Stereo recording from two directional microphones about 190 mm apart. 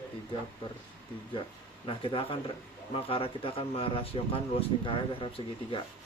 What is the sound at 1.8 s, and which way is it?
Speech, 25° left (ahead or behind).